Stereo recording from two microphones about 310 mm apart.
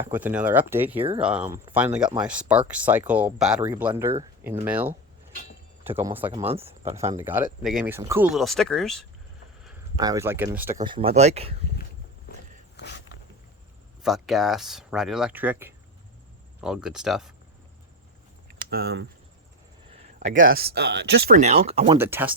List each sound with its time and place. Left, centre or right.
0.0 s speech: centre
0.9 s speech: centre
1.2 s speech: centre
10.0 s speech: centre
12.3 s walk: left
12.7 s a sound: left
14.0 s speech: centre
18.4 s a sound: right
20.4 s speech: right
21.9 s speech: centre